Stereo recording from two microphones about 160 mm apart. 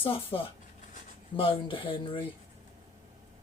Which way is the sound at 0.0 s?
35° left (ahead or behind).